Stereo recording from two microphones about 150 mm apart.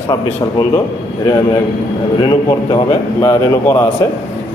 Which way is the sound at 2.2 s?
30° left (ahead or behind).